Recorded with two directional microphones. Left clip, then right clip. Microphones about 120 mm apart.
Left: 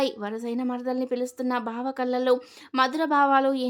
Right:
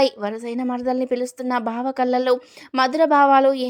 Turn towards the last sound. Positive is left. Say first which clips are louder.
# right 6 dB
turn(degrees=-40)  # may be behind; listen again after turning